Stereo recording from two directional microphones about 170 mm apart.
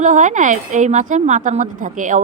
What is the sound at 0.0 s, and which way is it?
A woman's voice, 50° right (ahead or behind).